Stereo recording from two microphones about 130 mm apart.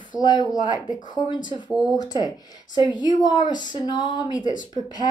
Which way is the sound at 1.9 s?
30° left (ahead or behind).